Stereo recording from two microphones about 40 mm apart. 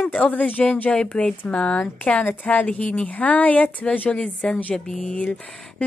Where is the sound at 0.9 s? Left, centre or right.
Left.